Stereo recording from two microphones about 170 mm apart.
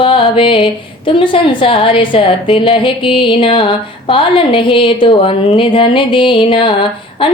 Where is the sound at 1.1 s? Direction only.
30° left (ahead or behind).